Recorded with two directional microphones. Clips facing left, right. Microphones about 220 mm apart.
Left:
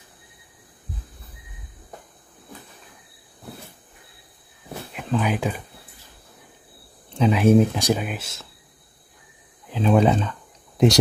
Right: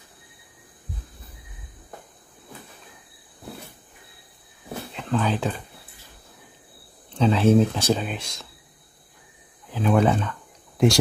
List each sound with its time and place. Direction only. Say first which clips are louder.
4.9 s speech: left 1 dB; 15° left (ahead or behind)
7.2 s speech: left 1 dB; 15° left (ahead or behind)
9.7 s speech: left 2 dB; 20° left (ahead or behind)